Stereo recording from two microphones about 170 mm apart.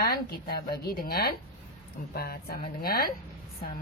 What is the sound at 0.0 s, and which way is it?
A woman's voice, 65° left (ahead or behind).